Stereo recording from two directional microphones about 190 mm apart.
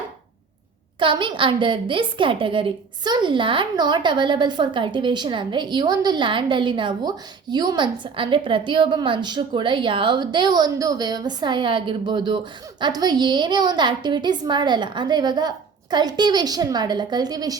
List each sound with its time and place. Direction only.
0.9 s a woman's voice: 25° right (ahead or behind)